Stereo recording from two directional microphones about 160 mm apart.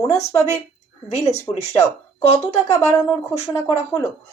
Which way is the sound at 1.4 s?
15° left (ahead or behind).